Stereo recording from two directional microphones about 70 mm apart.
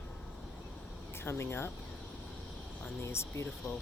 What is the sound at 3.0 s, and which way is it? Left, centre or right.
Speech, left.